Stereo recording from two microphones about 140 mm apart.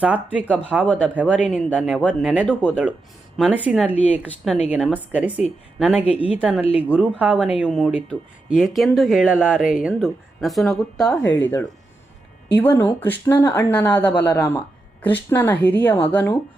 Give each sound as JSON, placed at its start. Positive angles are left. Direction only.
{"t": 0.0, "sound": "speech", "side_deg": -10}
{"t": 3.5, "sound": "speech", "side_deg": -10}
{"t": 11.2, "sound": "speech", "side_deg": 15}
{"t": 14.3, "sound": "speech", "side_deg": 25}
{"t": 15.0, "sound": "speech", "side_deg": 10}